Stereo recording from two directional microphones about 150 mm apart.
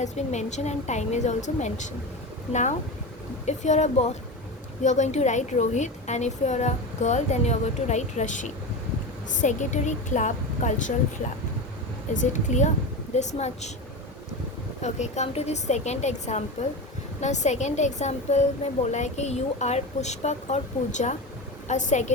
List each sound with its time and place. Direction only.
0.0 s a woman's voice: 50° left (ahead or behind)
12.1 s a woman's voice: 55° left (ahead or behind)
14.8 s a woman's voice: 50° left (ahead or behind)